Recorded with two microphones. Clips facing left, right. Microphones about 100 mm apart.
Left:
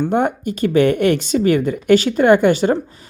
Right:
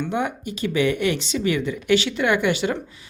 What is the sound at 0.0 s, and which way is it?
Speech, 50° left (ahead or behind).